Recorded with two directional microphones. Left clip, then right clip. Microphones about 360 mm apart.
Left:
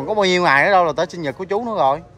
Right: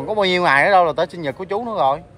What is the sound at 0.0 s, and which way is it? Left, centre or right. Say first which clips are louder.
Speech: left 1 dB; centre.